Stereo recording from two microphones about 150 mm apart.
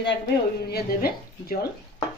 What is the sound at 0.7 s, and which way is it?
Speech, 90° left.